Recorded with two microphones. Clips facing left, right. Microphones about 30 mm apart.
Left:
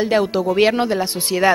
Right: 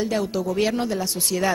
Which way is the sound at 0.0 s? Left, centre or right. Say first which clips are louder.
Left 7 dB; left.